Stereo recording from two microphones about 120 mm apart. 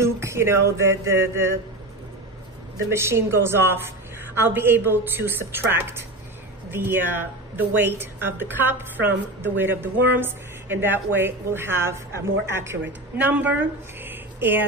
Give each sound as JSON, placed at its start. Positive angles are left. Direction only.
{"t": 0.0, "sound": "music", "side_deg": -25}
{"t": 2.9, "sound": "a woman's voice", "side_deg": -20}